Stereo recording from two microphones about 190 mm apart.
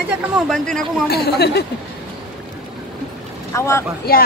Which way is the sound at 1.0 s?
55° left (ahead or behind).